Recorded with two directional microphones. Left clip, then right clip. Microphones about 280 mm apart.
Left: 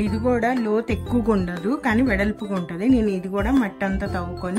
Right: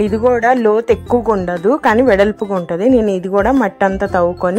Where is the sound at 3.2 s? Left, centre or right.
Right.